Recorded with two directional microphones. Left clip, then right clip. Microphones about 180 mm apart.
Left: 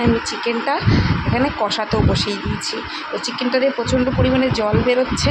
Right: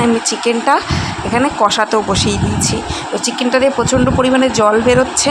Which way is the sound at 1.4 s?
20° right (ahead or behind).